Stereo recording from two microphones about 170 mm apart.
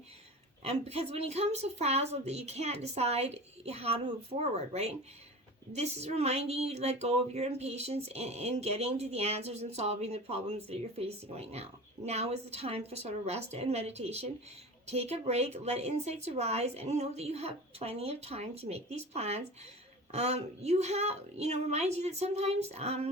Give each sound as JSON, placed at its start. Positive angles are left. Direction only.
{"t": 0.6, "sound": "speech", "side_deg": -35}